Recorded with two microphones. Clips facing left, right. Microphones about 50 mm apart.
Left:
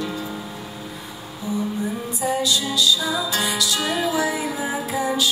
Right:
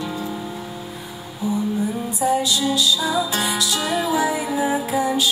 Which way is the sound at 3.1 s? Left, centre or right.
Right.